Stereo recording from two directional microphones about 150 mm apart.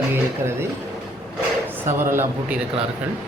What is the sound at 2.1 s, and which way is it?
Speech, 15° right (ahead or behind).